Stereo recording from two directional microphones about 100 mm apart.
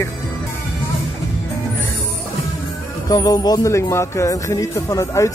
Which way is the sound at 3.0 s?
40° left (ahead or behind).